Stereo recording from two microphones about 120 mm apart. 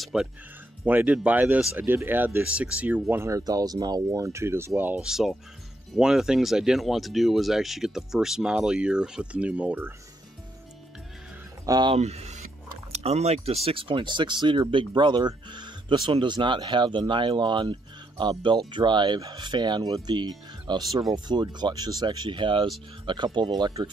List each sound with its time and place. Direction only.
0.0 s speech: 5° right (ahead or behind)
5.0 s speech: centre (ahead or behind)
11.6 s speech: 30° right (ahead or behind)
11.9 s speech: 60° right (ahead or behind)
13.7 s speech: 50° right (ahead or behind)